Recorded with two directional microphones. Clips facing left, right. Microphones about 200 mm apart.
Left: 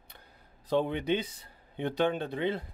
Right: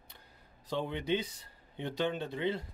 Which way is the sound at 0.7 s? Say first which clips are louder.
Left 5 dB; 55° left (ahead or behind).